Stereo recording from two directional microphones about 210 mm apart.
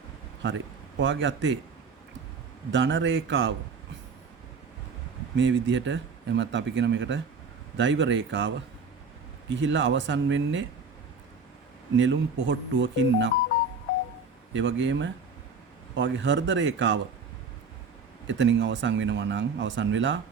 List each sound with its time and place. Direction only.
0.9 s speech: 60° right (ahead or behind)
2.7 s speech: 60° right (ahead or behind)
5.4 s speech: 60° right (ahead or behind)
11.9 s speech: 60° right (ahead or behind)
14.5 s speech: 60° right (ahead or behind)
18.3 s speech: 60° right (ahead or behind)